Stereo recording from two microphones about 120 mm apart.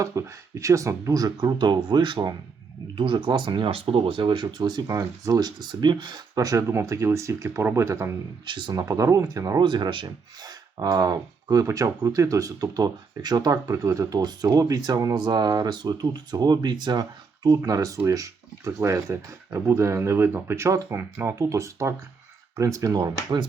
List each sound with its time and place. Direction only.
0.0 s speech: 25° right (ahead or behind)
8.4 s speech: 40° right (ahead or behind)
9.6 s speech: 40° right (ahead or behind)